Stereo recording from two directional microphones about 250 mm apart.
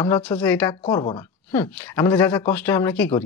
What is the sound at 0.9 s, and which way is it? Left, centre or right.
Speech, centre.